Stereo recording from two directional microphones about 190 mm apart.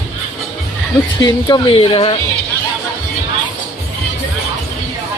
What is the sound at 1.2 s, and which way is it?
Speech, 20° left (ahead or behind).